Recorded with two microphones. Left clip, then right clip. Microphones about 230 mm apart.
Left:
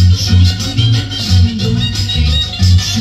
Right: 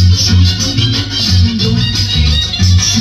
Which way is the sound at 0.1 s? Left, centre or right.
Centre.